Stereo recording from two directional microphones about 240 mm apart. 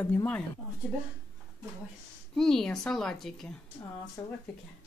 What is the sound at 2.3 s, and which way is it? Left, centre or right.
A woman's voice, centre.